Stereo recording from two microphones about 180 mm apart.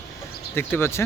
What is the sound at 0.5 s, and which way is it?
Speech, 15° left (ahead or behind).